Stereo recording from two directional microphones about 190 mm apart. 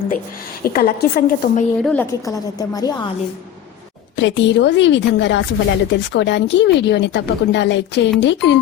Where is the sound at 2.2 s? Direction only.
20° left (ahead or behind).